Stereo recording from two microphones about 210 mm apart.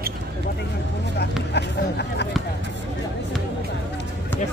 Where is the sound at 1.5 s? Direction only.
55° left (ahead or behind).